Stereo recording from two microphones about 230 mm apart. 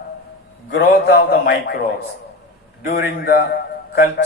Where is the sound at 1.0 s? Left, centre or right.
Left.